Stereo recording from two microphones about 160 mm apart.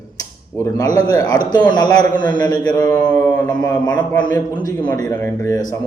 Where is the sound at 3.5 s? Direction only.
25° left (ahead or behind).